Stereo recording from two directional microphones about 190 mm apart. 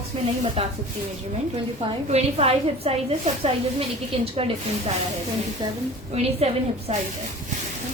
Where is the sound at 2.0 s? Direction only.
35° right (ahead or behind).